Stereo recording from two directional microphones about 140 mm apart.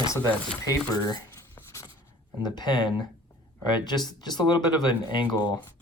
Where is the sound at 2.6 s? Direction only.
30° left (ahead or behind).